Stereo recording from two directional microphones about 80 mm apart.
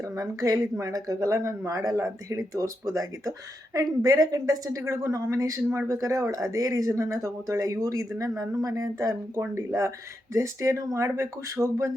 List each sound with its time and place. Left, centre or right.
0.0 s speech: right